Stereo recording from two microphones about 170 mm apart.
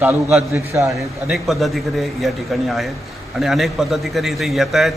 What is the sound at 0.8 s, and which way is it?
A man's voice, centre (ahead or behind).